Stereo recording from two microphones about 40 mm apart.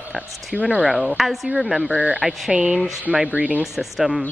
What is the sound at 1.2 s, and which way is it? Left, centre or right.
Speech, centre.